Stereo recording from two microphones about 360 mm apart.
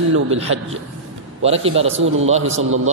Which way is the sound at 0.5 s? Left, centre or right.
Right.